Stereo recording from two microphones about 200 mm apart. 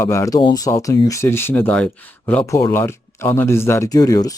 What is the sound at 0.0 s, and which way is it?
Speech, 15° left (ahead or behind).